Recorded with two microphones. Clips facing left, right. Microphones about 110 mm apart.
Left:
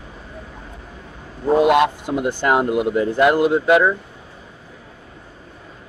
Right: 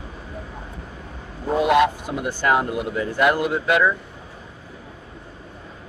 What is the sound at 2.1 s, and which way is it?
Speech, 20° left (ahead or behind).